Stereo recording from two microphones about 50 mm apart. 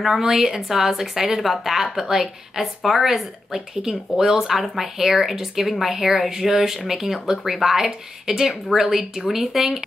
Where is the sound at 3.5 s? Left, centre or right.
Centre.